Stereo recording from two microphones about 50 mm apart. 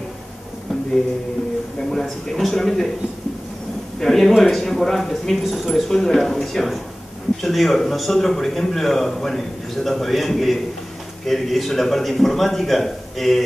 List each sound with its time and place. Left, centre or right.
1.9 s speech: centre
4.0 s speech: centre